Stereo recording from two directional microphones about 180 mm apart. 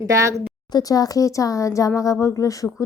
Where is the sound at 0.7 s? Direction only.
20° left (ahead or behind).